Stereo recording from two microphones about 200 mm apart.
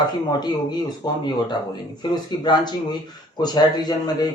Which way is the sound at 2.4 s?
20° left (ahead or behind).